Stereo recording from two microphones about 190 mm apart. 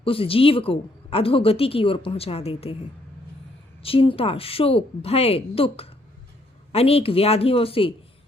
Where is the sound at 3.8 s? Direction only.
30° left (ahead or behind).